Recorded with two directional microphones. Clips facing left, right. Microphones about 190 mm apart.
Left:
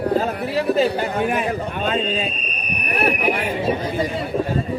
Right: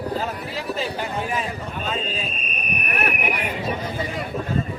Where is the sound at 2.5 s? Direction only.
35° left (ahead or behind).